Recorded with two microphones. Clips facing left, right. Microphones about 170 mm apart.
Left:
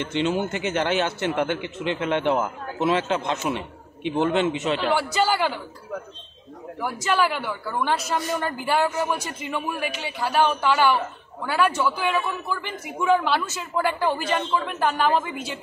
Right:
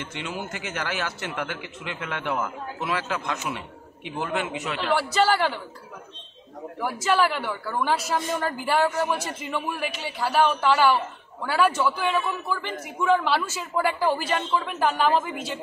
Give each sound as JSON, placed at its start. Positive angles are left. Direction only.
{"t": 0.0, "sound": "a man's voice", "side_deg": 25}
{"t": 4.9, "sound": "a woman's voice", "side_deg": 0}
{"t": 6.8, "sound": "a woman's voice", "side_deg": 0}